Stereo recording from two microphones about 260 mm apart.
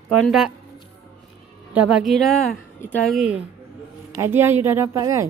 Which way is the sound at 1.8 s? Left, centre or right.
Centre.